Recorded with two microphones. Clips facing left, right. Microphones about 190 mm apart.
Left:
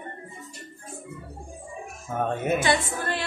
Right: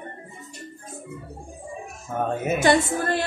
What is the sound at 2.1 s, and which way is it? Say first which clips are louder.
Speech: right 1 dB; centre (ahead or behind).